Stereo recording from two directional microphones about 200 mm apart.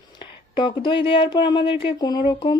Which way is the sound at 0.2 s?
25° left (ahead or behind).